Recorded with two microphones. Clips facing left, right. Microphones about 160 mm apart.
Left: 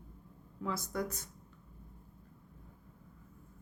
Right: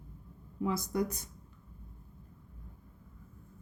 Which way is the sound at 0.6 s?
15° right (ahead or behind).